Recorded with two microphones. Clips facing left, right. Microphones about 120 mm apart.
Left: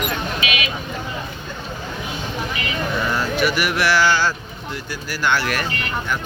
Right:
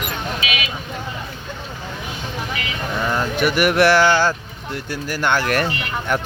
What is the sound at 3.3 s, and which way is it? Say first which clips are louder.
Speech: right 5 dB; 55° right (ahead or behind).